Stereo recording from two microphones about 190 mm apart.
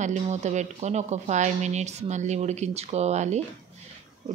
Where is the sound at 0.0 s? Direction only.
40° right (ahead or behind).